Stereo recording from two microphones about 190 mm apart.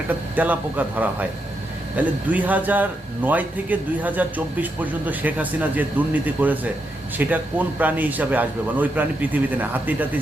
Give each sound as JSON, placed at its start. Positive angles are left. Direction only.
{"t": 0.3, "sound": "a man's voice", "side_deg": -10}